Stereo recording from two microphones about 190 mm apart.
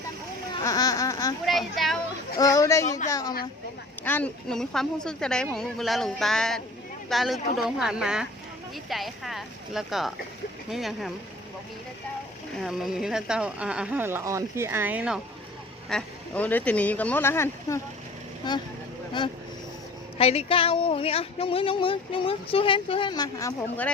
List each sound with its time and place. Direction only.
0.6 s a sound: 20° left (ahead or behind)
1.5 s a sound: centre (ahead or behind)
2.4 s speech: 20° left (ahead or behind); by 11.1 s centre (ahead or behind)
12.5 s speech: centre (ahead or behind)
15.9 s speech: 5° left (ahead or behind)
20.1 s speech: 30° left (ahead or behind); by 23.9 s 15° left (ahead or behind)